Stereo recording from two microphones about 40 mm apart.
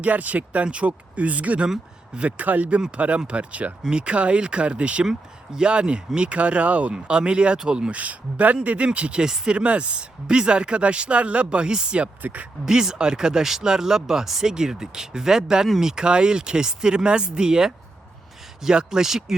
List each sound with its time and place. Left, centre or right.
0.0 s speech: right
7.1 s speech: right
7.9 s speech: right
9.2 s speech: centre
9.5 s speech: right
12.2 s speech: right
12.6 s speech: centre